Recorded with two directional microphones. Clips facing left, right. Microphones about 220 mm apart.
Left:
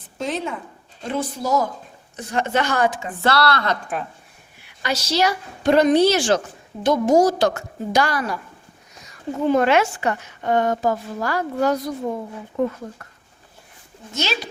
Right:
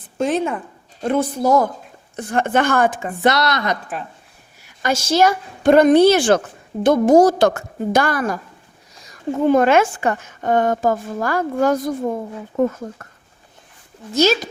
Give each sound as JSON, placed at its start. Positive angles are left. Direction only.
{"t": 0.2, "sound": "a woman's voice", "side_deg": -50}
{"t": 3.2, "sound": "a woman's voice", "side_deg": -20}
{"t": 4.6, "sound": "a woman's voice", "side_deg": -50}
{"t": 9.5, "sound": "a woman's voice", "side_deg": -50}
{"t": 14.1, "sound": "speech", "side_deg": -40}